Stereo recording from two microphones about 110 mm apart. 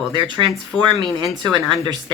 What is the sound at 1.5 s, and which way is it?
Speech, 40° right (ahead or behind).